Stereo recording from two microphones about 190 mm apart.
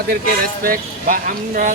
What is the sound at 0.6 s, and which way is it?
Speech, 50° right (ahead or behind).